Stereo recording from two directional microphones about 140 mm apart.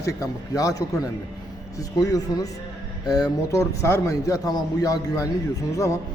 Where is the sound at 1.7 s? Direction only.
25° left (ahead or behind).